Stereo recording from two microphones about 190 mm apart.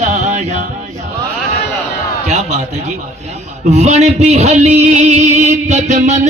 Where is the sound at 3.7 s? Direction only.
35° right (ahead or behind).